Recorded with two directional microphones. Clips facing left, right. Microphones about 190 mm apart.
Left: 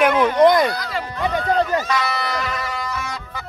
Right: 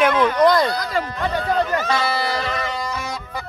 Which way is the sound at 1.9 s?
30° right (ahead or behind).